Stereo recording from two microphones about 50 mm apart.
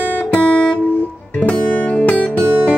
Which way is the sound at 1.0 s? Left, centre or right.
Left.